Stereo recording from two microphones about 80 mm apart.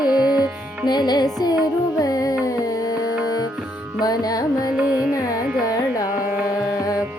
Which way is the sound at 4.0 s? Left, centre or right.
Left.